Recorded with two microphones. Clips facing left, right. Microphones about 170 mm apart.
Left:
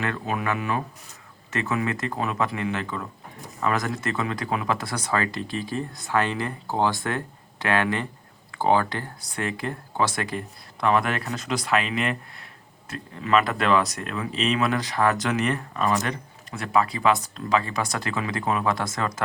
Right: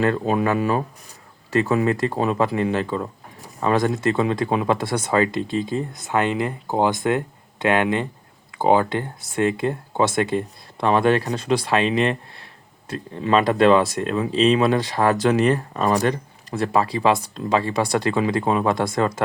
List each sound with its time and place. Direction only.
0.0 s speech: 30° right (ahead or behind)